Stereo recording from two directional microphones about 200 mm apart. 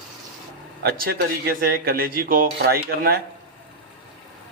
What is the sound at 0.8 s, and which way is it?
Speech, 50° right (ahead or behind).